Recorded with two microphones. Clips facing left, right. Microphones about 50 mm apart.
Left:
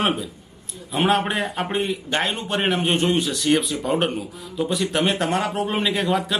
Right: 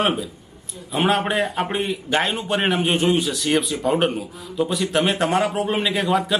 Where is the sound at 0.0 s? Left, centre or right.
Centre.